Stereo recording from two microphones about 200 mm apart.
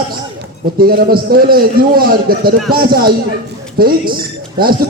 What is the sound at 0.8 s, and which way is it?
A man's voice, 50° right (ahead or behind).